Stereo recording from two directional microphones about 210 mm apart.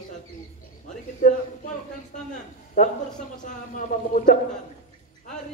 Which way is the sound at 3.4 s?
40° left (ahead or behind).